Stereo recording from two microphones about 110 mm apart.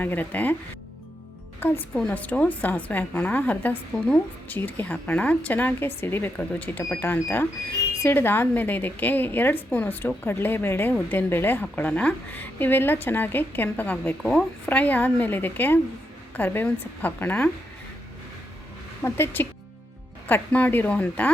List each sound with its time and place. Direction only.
0.0 s a woman's voice: 15° left (ahead or behind)
1.6 s a woman's voice: 15° left (ahead or behind)
14.2 s a woman's voice: centre (ahead or behind)
14.7 s a woman's voice: 15° left (ahead or behind)
19.0 s a woman's voice: 20° left (ahead or behind)